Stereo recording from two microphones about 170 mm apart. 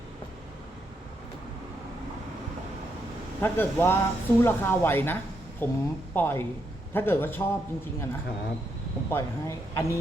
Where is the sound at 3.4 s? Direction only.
15° left (ahead or behind).